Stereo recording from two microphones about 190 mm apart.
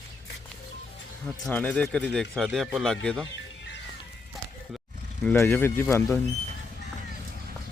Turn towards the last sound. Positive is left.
turn(degrees=15)  # may be behind; listen again after turning